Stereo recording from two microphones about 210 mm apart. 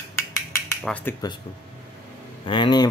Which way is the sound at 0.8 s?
5° left (ahead or behind).